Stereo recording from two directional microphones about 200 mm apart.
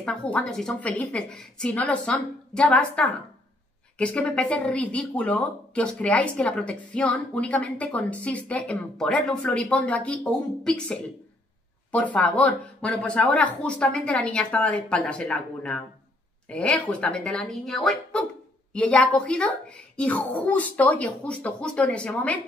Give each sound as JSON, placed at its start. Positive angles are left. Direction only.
{"t": 0.0, "sound": "speech", "side_deg": 5}